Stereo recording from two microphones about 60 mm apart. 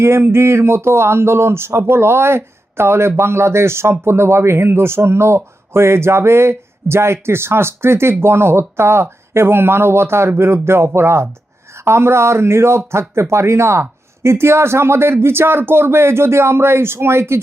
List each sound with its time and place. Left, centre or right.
0.0 s speech: right